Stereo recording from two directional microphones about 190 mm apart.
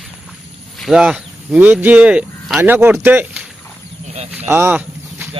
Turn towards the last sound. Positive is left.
turn(degrees=-10)  # may be behind; listen again after turning